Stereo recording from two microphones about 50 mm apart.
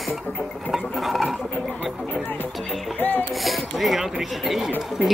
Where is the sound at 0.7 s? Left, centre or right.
Centre.